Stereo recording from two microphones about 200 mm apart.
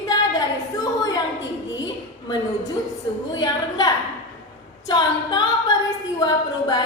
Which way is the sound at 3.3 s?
20° left (ahead or behind).